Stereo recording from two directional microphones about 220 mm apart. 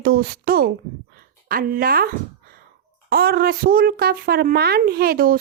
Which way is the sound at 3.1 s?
45° right (ahead or behind).